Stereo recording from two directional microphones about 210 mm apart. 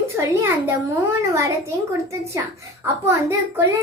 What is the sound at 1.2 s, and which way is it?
Speech, 15° right (ahead or behind).